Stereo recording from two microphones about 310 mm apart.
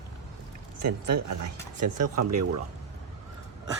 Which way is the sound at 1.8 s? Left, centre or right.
Right.